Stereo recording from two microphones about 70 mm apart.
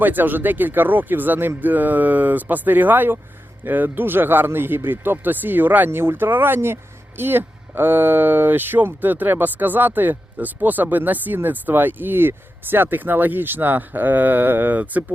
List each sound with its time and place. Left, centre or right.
0.0 s speech: right